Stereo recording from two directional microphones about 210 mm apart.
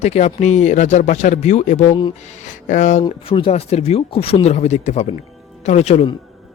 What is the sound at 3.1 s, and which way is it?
Speech, 25° left (ahead or behind).